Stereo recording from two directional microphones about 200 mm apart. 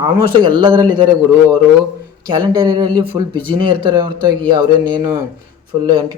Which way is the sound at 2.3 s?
20° right (ahead or behind).